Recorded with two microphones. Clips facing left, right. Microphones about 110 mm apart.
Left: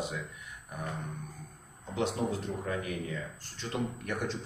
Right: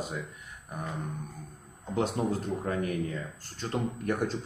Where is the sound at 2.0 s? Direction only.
45° right (ahead or behind).